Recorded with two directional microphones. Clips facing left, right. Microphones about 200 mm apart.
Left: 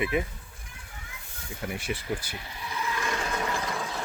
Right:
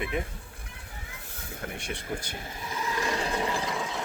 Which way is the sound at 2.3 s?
45° right (ahead or behind).